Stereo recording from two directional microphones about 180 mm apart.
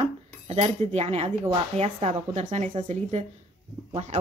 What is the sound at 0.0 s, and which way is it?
Cutlery, 35° right (ahead or behind).